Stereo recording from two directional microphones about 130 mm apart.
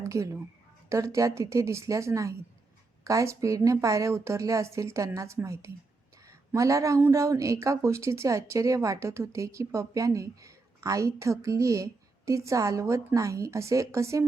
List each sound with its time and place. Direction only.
0.0 s speech: 25° right (ahead or behind)